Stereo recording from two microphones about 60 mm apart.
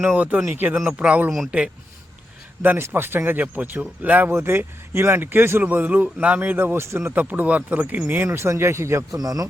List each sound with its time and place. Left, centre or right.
0.0 s a man's voice: right
0.9 s speech: right
2.6 s a man's voice: right
4.4 s a man's voice: right
7.1 s speech: right
8.0 s speech: right
9.1 s speech: right